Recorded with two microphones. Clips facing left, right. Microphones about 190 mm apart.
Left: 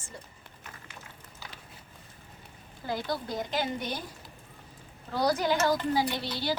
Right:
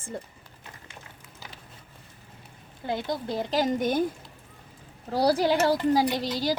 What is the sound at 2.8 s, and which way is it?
Speech, 25° right (ahead or behind).